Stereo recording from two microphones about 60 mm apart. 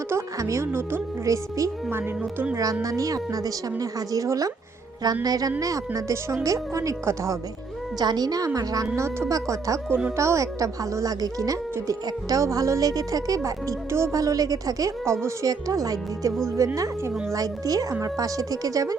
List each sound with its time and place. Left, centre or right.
0.3 s speech: right
1.2 s a woman's voice: right
1.9 s speech: right
2.8 s speech: right
5.2 s speech: right
6.3 s a woman's voice: right
7.9 s a woman's voice: right
9.3 s a woman's voice: right
14.2 s speech: right
16.6 s speech: right
17.3 s speech: right